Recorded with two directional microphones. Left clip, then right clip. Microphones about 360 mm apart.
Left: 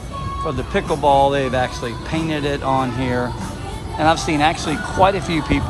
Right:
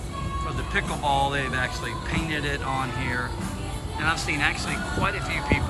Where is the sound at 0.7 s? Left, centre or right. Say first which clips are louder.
Left 9 dB; centre.